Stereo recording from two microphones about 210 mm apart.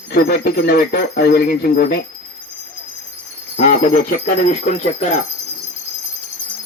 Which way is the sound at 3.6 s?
35° left (ahead or behind).